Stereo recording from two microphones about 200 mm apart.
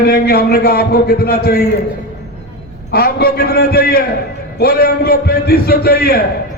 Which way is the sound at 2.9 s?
50° left (ahead or behind).